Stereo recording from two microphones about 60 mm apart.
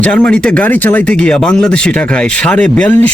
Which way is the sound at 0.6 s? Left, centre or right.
Left.